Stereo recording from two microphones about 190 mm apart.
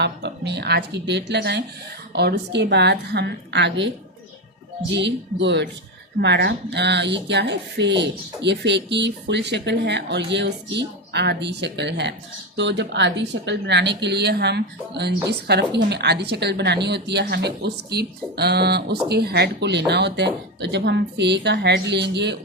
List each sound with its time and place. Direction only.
0.0 s speech: 60° right (ahead or behind)
4.9 s speech: 70° right (ahead or behind)